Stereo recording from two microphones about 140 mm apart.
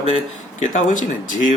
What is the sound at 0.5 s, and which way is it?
Speech, 65° left (ahead or behind).